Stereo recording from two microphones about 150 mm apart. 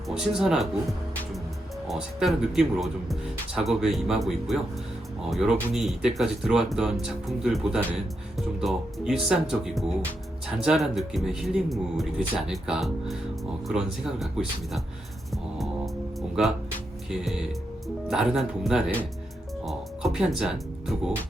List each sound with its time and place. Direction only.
0.1 s speech: 5° right (ahead or behind)
17.1 s speech: 5° right (ahead or behind)